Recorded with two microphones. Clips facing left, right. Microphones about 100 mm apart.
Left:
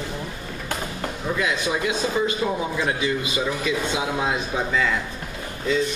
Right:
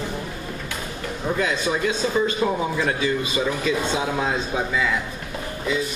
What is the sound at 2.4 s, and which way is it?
Speech, 40° right (ahead or behind).